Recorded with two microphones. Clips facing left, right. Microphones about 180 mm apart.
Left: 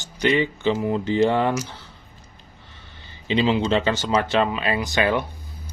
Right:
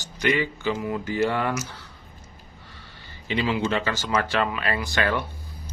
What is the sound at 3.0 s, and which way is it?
Speech, 20° left (ahead or behind).